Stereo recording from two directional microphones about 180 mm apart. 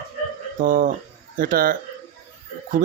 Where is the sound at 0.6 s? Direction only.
50° right (ahead or behind).